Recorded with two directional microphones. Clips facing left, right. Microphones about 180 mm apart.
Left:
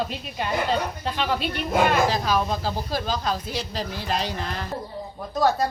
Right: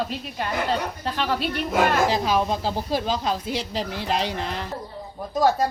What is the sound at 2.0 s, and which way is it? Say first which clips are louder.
Speech: right 2 dB; 20° right (ahead or behind).